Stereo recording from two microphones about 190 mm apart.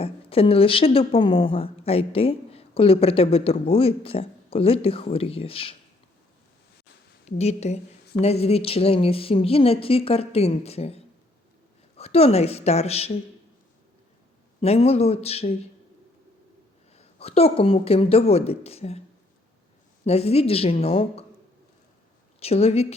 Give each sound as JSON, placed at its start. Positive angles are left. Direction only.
{"t": 0.0, "sound": "a woman's voice", "side_deg": 30}
{"t": 7.3, "sound": "a woman's voice", "side_deg": 35}
{"t": 14.6, "sound": "a woman's voice", "side_deg": 30}
{"t": 16.9, "sound": "a woman's voice", "side_deg": 30}
{"t": 20.1, "sound": "a woman's voice", "side_deg": 30}
{"t": 22.4, "sound": "a woman's voice", "side_deg": 35}